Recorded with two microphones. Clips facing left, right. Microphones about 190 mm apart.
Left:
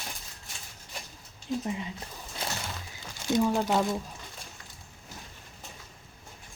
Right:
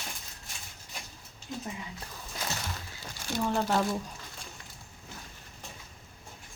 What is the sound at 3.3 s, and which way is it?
Speech, 15° left (ahead or behind).